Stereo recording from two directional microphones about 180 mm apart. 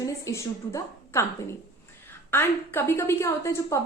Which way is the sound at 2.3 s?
10° left (ahead or behind).